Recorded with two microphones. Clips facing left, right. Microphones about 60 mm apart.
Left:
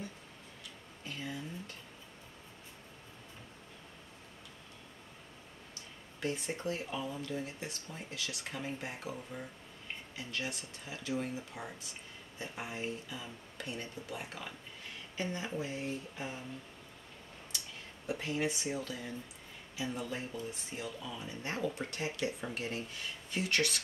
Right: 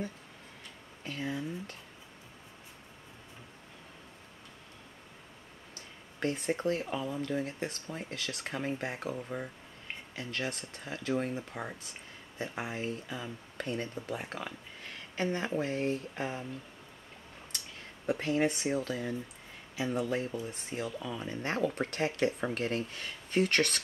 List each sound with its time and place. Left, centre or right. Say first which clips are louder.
1.0 s speech: right 6 dB; right
6.1 s speech: right 5 dB; right
18.0 s speech: right 6 dB; right
20.7 s speech: right 8 dB; right